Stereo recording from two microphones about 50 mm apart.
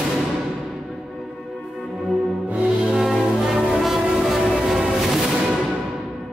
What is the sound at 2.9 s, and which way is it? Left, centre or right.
Brass instrument, centre.